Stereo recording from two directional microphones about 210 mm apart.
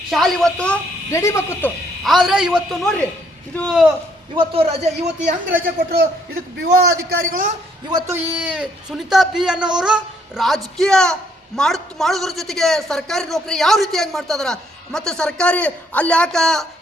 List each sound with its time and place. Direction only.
0.1 s a man's voice: centre (ahead or behind)
2.0 s a man's voice: centre (ahead or behind)
4.4 s a man's voice: 25° right (ahead or behind)
7.1 s a man's voice: 40° right (ahead or behind)
7.9 s a man's voice: 15° right (ahead or behind); by 16.6 s centre (ahead or behind)